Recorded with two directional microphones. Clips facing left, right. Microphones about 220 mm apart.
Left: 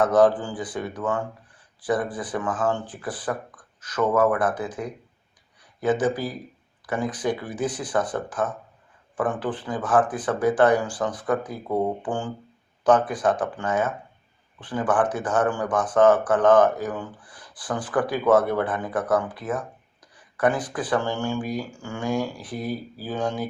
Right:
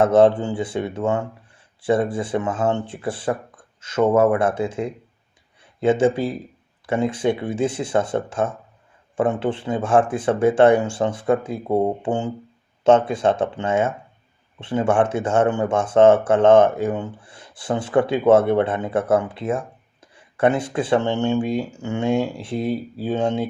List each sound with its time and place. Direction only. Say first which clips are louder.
0.0 s speech: right 4 dB; 25° right (ahead or behind)